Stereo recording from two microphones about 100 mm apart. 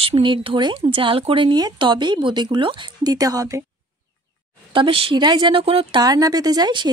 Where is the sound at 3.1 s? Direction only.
35° right (ahead or behind).